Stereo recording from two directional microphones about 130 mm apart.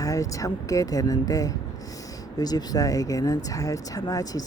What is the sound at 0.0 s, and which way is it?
Speech, 25° left (ahead or behind).